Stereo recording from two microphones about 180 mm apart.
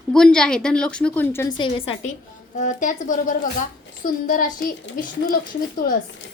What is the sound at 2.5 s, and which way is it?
Speech, 45° left (ahead or behind).